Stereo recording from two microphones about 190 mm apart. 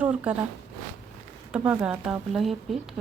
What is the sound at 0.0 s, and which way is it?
Speech, 5° right (ahead or behind).